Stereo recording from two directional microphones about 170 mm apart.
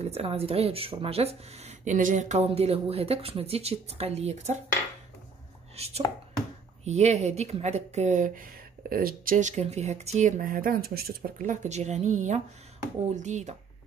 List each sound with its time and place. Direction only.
0.0 s speech: 35° right (ahead or behind)
5.8 s speech: 40° right (ahead or behind)